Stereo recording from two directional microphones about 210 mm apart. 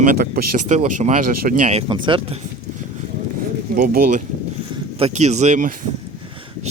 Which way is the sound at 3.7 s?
40° right (ahead or behind).